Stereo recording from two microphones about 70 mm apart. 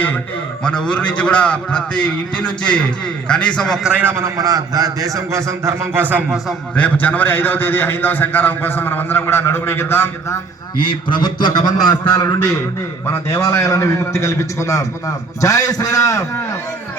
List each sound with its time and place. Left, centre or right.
0.6 s a man's voice: centre
4.1 s a man's voice: right
4.4 s a man's voice: right
6.7 s a man's voice: left
10.8 s a man's voice: left
12.1 s a man's voice: left
13.1 s a man's voice: left